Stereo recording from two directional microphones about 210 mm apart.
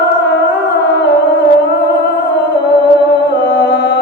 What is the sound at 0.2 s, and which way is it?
Music, 55° left (ahead or behind).